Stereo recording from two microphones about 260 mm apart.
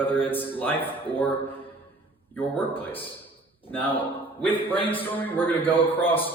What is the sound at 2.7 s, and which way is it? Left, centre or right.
Speech, left.